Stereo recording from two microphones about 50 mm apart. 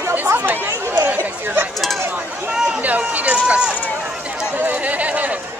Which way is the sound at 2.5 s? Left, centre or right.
Centre.